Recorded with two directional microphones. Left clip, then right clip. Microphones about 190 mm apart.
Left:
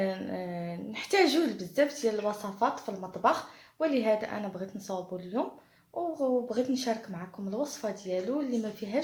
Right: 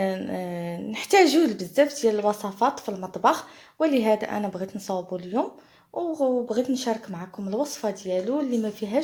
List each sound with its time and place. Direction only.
0.0 s speech: 35° right (ahead or behind)